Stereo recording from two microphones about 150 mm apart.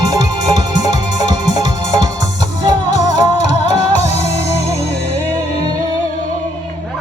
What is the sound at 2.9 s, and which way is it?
Music, 50° left (ahead or behind).